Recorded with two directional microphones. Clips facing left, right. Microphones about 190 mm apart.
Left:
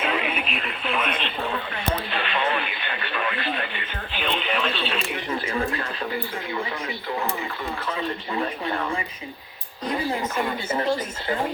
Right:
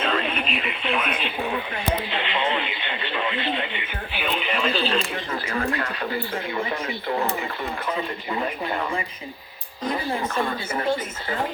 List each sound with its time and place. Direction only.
0.0 s speech: 10° left (ahead or behind)
1.5 s speech: 15° right (ahead or behind)
4.2 s speech: 5° right (ahead or behind)